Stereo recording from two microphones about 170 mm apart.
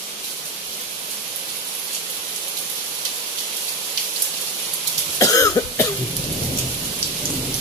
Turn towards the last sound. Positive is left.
turn(degrees=20)  # may be behind; listen again after turning